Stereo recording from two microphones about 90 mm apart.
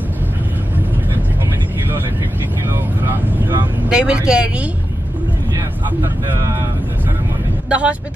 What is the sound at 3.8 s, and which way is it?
Speech, 10° right (ahead or behind).